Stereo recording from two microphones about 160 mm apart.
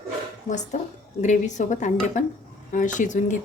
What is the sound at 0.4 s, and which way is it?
Speech, 50° left (ahead or behind).